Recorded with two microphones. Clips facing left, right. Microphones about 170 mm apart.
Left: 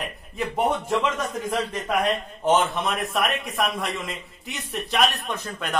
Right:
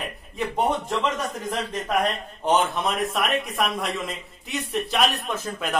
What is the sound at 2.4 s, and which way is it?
A man's voice, centre (ahead or behind).